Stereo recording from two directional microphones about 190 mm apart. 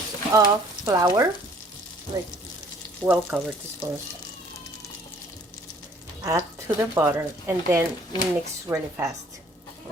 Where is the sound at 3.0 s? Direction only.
10° right (ahead or behind).